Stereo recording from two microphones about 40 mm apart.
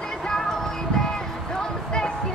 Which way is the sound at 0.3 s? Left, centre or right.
Centre.